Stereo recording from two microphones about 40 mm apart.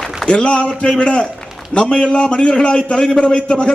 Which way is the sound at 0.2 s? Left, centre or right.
Left.